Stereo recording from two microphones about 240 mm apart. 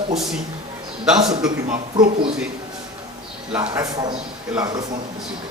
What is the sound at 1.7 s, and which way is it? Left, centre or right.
Speech, right.